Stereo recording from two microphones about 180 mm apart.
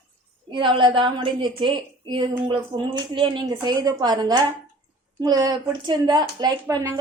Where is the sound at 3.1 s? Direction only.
25° right (ahead or behind).